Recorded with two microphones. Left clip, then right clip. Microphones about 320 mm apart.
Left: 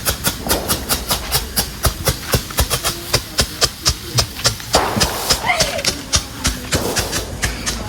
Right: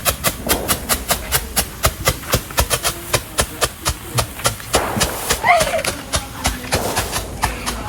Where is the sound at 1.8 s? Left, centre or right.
Right.